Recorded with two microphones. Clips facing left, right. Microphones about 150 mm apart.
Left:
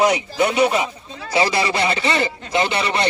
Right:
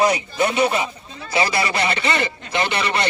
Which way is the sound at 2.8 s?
25° left (ahead or behind).